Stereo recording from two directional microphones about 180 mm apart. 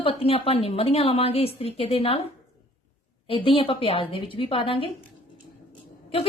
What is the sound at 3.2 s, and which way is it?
A woman's voice, 30° left (ahead or behind).